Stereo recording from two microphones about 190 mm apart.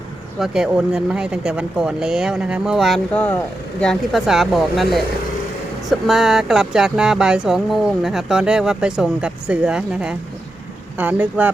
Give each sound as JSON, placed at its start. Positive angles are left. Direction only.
{"t": 0.3, "sound": "speech", "side_deg": 0}